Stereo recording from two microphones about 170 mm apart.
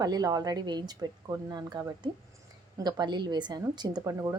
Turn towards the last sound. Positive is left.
turn(degrees=-20)  # may be behind; listen again after turning